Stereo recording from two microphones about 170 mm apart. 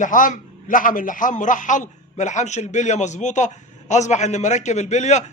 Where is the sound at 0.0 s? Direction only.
50° left (ahead or behind).